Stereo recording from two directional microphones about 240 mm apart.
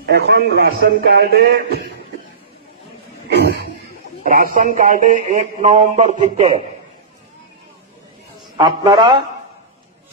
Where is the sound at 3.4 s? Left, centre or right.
Right.